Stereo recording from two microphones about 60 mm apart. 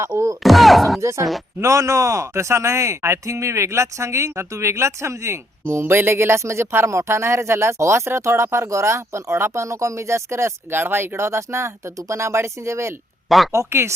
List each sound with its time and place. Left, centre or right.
0.0 s speech: right
0.4 s speech: centre
1.0 s speech: right
10.8 s speech: right
13.2 s speech: centre
13.5 s speech: right